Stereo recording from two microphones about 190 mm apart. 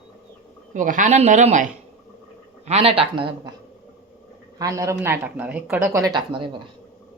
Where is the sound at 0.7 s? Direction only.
45° right (ahead or behind).